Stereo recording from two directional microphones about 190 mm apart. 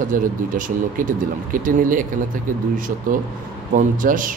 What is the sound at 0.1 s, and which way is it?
Speech, 45° right (ahead or behind).